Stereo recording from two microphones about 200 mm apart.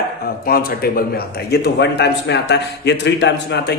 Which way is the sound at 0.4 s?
50° left (ahead or behind).